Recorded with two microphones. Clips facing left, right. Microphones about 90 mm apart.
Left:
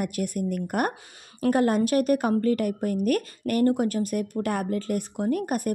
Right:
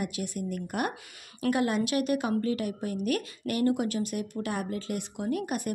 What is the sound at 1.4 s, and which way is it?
A woman's voice, 40° left (ahead or behind).